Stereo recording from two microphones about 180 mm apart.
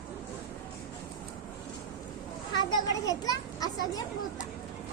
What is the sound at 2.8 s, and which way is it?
Children playing, 20° left (ahead or behind).